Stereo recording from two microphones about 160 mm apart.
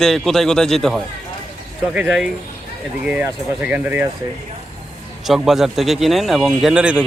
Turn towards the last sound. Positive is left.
turn(degrees=-5)  # may be behind; listen again after turning